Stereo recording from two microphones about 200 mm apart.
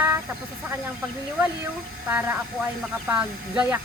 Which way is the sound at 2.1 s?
5° right (ahead or behind).